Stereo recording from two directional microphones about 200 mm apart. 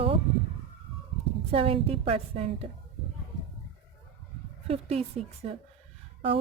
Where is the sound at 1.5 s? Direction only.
30° right (ahead or behind).